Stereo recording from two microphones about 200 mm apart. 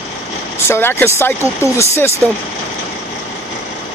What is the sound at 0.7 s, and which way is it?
Speech, 10° left (ahead or behind).